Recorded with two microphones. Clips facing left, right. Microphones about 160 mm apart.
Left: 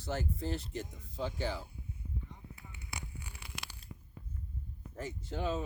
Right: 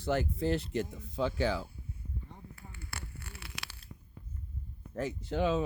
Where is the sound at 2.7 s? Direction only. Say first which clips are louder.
Even; 15° left (ahead or behind).